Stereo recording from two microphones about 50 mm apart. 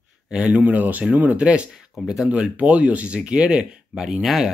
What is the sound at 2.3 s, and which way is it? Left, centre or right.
Speech, right.